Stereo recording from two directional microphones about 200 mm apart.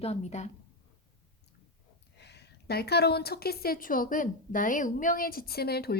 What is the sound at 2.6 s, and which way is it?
A woman's voice, 50° left (ahead or behind).